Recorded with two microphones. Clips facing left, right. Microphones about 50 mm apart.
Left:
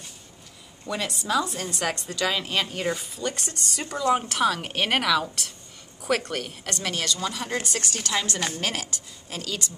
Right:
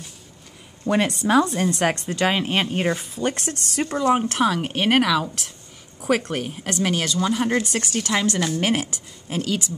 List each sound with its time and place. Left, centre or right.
0.8 s a woman's voice: right
3.3 s speech: right
3.8 s a woman's voice: right
4.4 s speech: centre
7.2 s speech: right
7.6 s speech: centre